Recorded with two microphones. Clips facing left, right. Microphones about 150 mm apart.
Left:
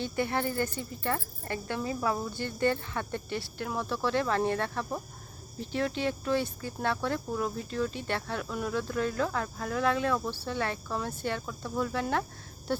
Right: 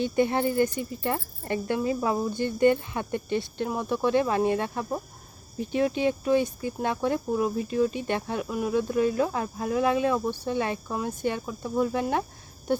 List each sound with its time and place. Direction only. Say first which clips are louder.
0.0 s speech: right 6 dB; 20° right (ahead or behind)